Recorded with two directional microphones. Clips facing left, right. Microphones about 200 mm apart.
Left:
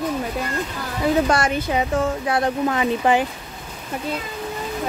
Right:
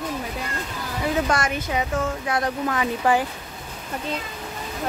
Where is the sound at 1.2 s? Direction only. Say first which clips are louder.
Left 4 dB; 30° left (ahead or behind).